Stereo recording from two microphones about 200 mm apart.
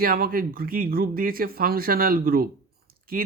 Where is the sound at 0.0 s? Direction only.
45° right (ahead or behind).